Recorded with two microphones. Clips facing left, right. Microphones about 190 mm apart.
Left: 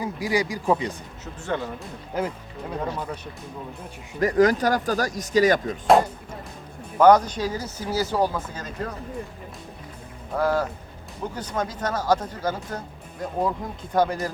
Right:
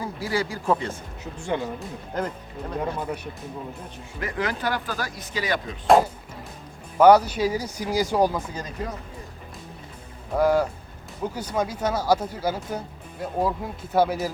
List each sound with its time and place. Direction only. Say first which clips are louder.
0.0 s speech: left 2 dB; 15° left (ahead or behind)
1.2 s speech: right 1 dB; 15° right (ahead or behind)
2.1 s speech: left 2 dB; 10° left (ahead or behind)
4.2 s speech: left 9 dB; 40° left (ahead or behind)
5.9 s speech: right 4 dB; centre (ahead or behind)
10.3 s speech: right 3 dB; 10° right (ahead or behind)